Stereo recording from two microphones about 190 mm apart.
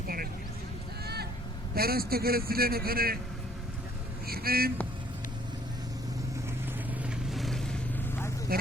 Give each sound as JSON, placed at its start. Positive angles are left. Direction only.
{"t": 1.0, "sound": "vehicle", "side_deg": -55}
{"t": 1.7, "sound": "a man's voice", "side_deg": -50}
{"t": 4.3, "sound": "speech", "side_deg": -50}
{"t": 7.0, "sound": "vehicle", "side_deg": 0}